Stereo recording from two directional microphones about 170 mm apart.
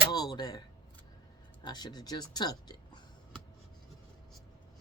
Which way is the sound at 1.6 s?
25° left (ahead or behind).